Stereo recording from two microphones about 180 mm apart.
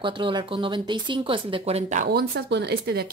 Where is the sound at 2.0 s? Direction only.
60° right (ahead or behind).